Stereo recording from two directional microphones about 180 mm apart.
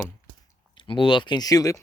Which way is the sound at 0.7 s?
30° left (ahead or behind).